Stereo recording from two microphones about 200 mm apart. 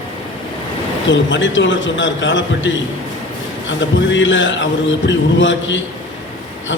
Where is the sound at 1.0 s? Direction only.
65° left (ahead or behind).